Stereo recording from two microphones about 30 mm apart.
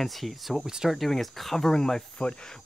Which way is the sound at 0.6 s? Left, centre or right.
Right.